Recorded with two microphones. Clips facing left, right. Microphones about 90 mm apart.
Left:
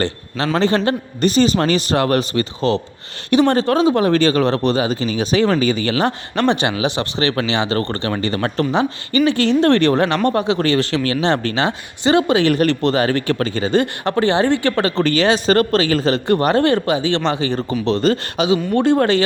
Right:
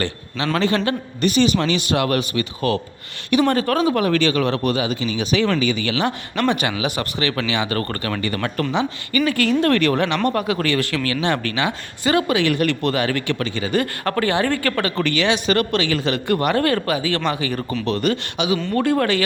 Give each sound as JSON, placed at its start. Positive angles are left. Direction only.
{"t": 0.5, "sound": "speech", "side_deg": 35}
{"t": 2.6, "sound": "speech", "side_deg": 25}
{"t": 9.2, "sound": "speech", "side_deg": 25}